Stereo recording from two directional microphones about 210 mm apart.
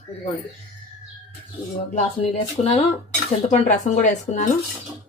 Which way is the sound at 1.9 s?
30° left (ahead or behind).